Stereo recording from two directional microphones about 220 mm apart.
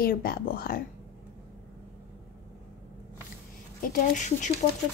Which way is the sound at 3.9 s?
35° left (ahead or behind).